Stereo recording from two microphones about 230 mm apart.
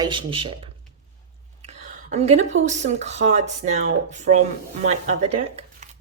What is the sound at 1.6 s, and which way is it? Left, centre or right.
Speech, right.